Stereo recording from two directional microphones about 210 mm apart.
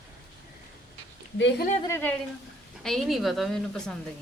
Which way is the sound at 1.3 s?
55° left (ahead or behind).